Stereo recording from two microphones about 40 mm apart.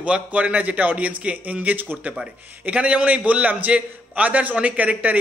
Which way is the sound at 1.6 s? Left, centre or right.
Right.